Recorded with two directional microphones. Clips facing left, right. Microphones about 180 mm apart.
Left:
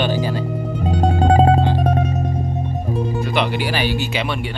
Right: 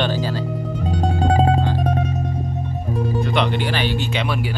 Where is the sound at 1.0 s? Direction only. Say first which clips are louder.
Left 4 dB; 65° left (ahead or behind).